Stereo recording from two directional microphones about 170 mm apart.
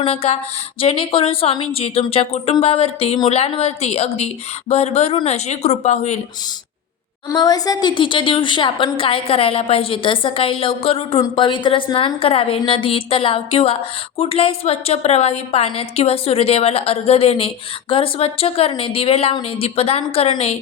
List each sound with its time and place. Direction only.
0.0 s a woman's voice: 35° left (ahead or behind)
7.3 s a woman's voice: 20° left (ahead or behind)